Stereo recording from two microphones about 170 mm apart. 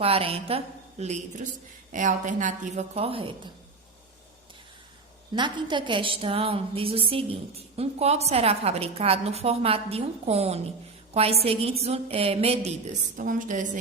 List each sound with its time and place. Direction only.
0.0 s a woman's voice: 35° right (ahead or behind)
5.3 s a woman's voice: 30° right (ahead or behind); by 13.7 s 50° right (ahead or behind)